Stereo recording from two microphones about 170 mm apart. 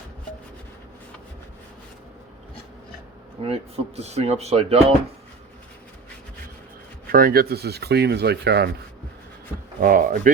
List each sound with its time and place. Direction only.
3.4 s speech: 35° right (ahead or behind)
7.1 s speech: 60° right (ahead or behind); by 8.7 s 75° right (ahead or behind)
9.8 s speech: 50° right (ahead or behind)